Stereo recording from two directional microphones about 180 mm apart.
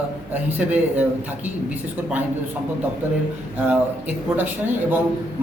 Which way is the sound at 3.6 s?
10° right (ahead or behind).